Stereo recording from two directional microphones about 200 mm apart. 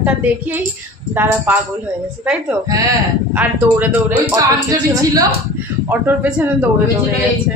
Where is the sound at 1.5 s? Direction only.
10° right (ahead or behind).